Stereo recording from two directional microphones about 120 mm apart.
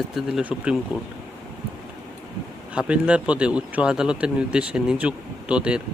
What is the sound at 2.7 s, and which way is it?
Speech, 10° right (ahead or behind).